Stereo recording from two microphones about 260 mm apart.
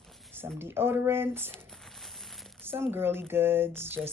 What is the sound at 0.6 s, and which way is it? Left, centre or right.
Speech, centre.